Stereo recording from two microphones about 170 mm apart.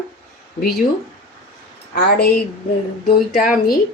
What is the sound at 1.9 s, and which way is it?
Speech, 80° left.